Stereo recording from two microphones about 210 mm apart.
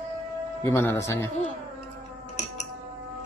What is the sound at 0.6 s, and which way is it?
Speech, 10° left (ahead or behind).